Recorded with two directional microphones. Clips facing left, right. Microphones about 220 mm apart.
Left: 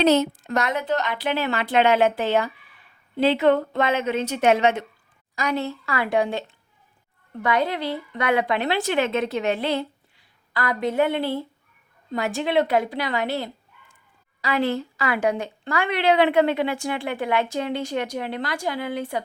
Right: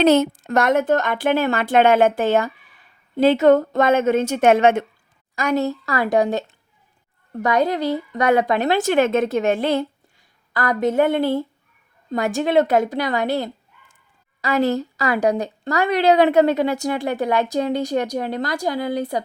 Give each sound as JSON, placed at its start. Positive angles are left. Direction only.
{"t": 0.0, "sound": "a woman's voice", "side_deg": -50}